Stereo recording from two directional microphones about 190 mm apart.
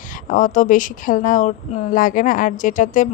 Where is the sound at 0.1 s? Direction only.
45° left (ahead or behind).